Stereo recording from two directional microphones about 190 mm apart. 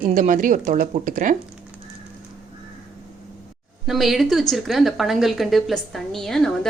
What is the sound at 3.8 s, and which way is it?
A woman's voice, centre (ahead or behind).